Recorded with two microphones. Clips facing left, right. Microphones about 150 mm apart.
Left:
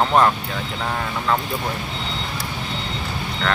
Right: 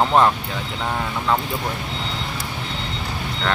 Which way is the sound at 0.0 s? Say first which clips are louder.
Even; centre (ahead or behind).